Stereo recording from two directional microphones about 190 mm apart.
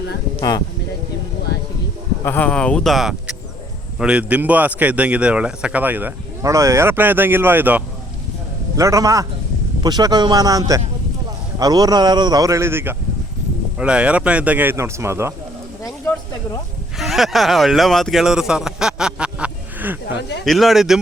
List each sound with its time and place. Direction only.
2.2 s a man's voice: 10° left (ahead or behind); by 15.3 s 15° right (ahead or behind)
17.0 s a man's voice: centre (ahead or behind)